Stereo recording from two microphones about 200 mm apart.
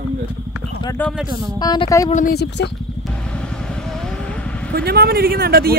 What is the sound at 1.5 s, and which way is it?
Speech, 20° left (ahead or behind).